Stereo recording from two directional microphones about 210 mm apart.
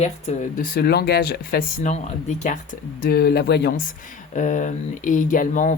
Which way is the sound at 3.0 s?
45° left (ahead or behind).